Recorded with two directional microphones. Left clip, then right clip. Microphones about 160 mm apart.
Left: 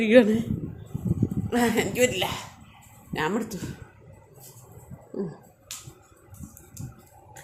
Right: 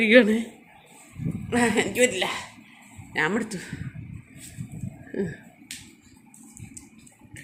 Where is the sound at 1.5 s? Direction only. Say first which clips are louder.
Right 2 dB; centre (ahead or behind).